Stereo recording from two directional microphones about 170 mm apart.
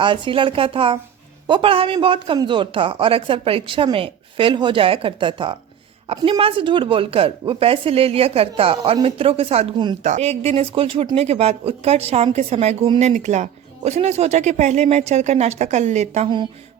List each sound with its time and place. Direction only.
0.0 s a woman's voice: 30° right (ahead or behind)